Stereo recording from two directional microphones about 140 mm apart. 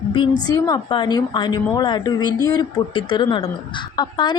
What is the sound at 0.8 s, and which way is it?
A woman's voice, 35° left (ahead or behind).